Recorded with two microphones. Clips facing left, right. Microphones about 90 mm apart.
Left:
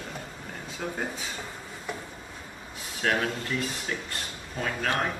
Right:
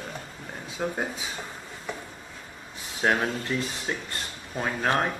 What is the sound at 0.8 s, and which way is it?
Speech, 20° right (ahead or behind).